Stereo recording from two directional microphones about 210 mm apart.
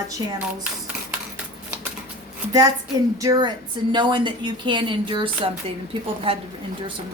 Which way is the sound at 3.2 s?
15° right (ahead or behind).